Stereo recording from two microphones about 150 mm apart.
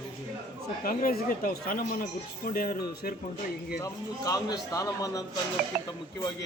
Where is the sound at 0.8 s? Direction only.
70° left (ahead or behind).